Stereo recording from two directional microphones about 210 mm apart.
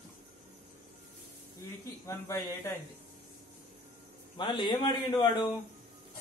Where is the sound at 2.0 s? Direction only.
15° left (ahead or behind).